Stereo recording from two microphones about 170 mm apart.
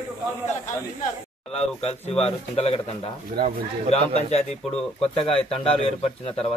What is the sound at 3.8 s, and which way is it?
A man's voice, 40° left (ahead or behind).